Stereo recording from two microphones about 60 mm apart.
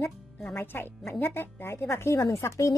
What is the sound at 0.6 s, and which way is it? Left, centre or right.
A woman's voice, left.